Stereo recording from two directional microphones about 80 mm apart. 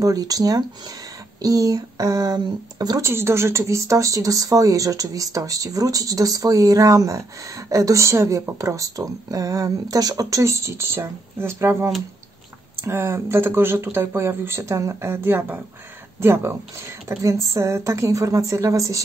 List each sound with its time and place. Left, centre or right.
0.0 s speech: right
3.0 s speech: right